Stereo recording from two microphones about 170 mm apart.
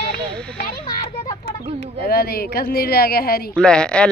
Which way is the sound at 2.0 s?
65° left (ahead or behind).